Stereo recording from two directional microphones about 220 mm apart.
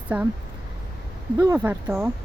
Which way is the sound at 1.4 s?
10° right (ahead or behind).